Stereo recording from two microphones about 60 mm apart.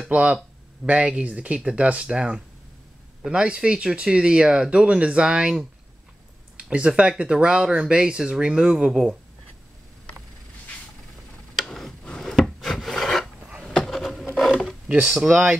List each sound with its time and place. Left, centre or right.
0.1 s speech: right
6.5 s a sound: centre
6.9 s speech: centre
11.5 s tick-tock: centre
12.0 s filing: centre
13.7 s a sound: centre
14.9 s speech: centre